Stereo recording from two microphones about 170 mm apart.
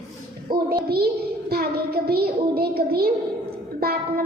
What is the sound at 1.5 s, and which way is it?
Child singing, 65° right (ahead or behind).